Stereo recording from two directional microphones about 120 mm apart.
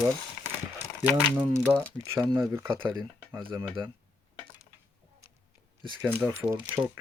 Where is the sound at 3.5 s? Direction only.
35° right (ahead or behind).